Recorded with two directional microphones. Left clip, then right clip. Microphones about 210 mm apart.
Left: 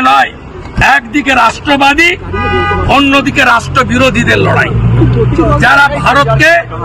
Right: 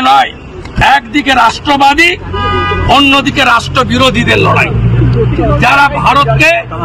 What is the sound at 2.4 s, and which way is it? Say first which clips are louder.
Music: even; 30° right (ahead or behind).